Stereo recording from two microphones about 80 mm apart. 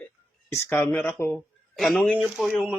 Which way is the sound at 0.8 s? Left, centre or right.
Left.